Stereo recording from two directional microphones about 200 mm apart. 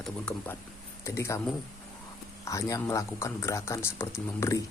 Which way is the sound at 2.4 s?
15° left (ahead or behind).